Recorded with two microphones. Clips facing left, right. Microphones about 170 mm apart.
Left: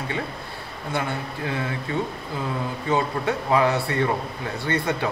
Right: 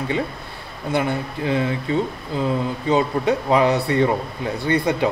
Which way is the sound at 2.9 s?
20° right (ahead or behind).